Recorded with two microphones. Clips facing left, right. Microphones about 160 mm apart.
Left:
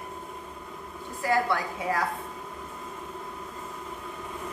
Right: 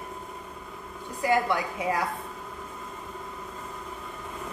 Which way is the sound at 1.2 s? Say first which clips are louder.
Right 1 dB; 15° right (ahead or behind).